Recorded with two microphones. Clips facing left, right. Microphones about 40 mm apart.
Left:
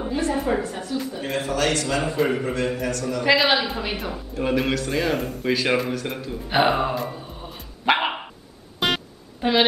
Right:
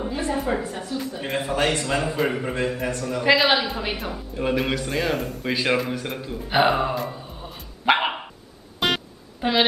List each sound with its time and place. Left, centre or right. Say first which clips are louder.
0.3 s speech: even; centre
1.2 s a man's voice: right 1 dB; centre
2.0 s speech: left 1 dB; centre
2.8 s a man's voice: even; centre
3.3 s speech: even; centre
6.0 s music: left 1 dB; centre